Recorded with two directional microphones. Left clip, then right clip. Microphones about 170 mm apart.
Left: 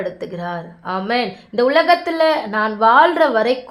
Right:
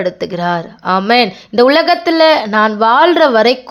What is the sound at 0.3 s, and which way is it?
Speech, 35° right (ahead or behind).